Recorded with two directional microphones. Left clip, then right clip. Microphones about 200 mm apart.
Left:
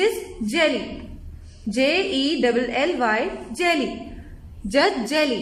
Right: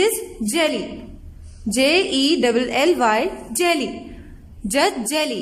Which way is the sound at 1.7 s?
60° right (ahead or behind).